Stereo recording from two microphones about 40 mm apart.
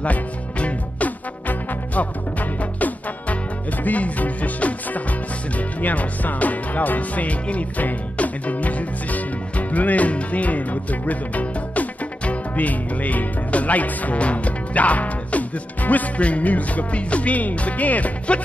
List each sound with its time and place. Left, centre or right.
0.0 s music: left
3.8 s music: left